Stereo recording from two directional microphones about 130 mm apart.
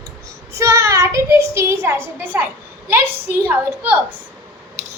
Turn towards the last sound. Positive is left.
turn(degrees=-15)  # may be behind; listen again after turning